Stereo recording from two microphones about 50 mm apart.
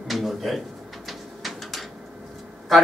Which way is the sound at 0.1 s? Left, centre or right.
Centre.